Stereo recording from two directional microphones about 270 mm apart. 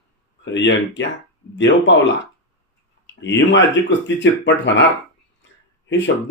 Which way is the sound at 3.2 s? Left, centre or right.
Left.